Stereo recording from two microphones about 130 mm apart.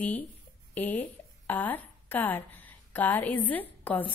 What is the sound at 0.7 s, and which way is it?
A woman's voice, 15° left (ahead or behind).